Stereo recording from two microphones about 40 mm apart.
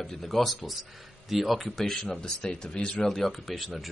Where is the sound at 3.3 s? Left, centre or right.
Centre.